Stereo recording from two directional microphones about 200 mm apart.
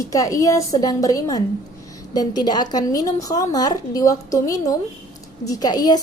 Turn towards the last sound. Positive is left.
turn(degrees=20)  # may be behind; listen again after turning